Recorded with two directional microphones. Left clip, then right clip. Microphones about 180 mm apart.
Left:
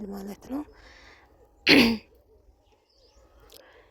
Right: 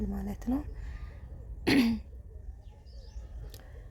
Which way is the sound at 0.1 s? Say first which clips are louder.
Right 1 dB; 35° left (ahead or behind).